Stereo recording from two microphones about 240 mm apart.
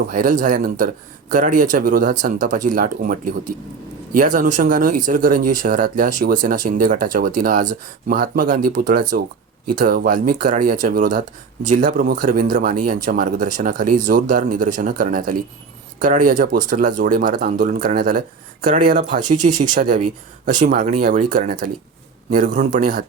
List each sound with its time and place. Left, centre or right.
0.1 s speech: right